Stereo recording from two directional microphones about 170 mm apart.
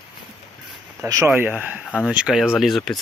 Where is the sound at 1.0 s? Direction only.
15° right (ahead or behind).